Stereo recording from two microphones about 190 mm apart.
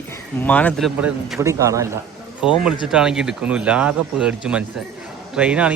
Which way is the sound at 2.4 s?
5° right (ahead or behind).